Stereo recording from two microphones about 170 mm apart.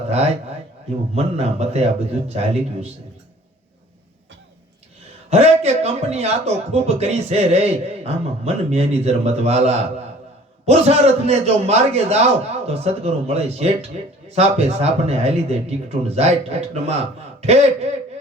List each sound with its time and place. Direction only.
1.1 s speech: 40° right (ahead or behind)
5.3 s speech: 40° right (ahead or behind)